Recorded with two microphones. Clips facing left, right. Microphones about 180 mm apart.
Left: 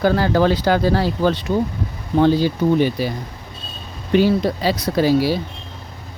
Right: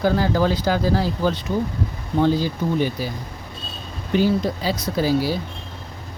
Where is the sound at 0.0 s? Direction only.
70° left (ahead or behind).